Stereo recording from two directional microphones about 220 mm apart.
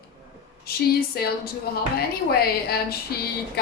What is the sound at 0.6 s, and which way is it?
A woman's voice, 45° left (ahead or behind).